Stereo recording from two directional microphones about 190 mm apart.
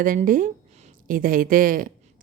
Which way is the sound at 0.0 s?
45° right (ahead or behind).